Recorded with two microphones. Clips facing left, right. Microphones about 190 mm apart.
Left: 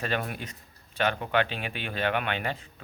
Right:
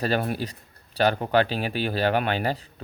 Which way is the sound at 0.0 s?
35° right (ahead or behind).